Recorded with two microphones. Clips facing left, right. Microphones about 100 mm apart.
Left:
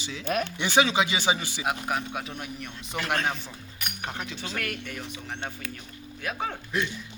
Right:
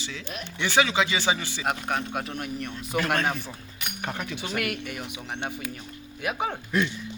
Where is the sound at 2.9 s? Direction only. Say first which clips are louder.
Right 3 dB; 50° right (ahead or behind).